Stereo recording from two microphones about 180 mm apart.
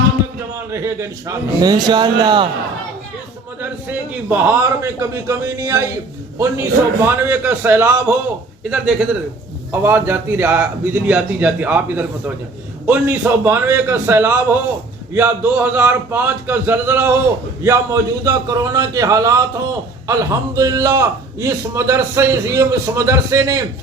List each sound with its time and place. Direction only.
0.5 s a man's voice: 15° right (ahead or behind)
3.6 s a man's voice: 10° right (ahead or behind)